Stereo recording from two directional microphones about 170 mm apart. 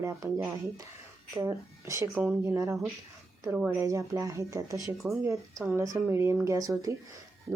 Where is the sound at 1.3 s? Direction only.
20° right (ahead or behind).